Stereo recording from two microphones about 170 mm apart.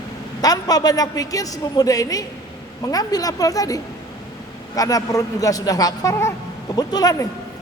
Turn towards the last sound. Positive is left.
turn(degrees=20)  # may be behind; listen again after turning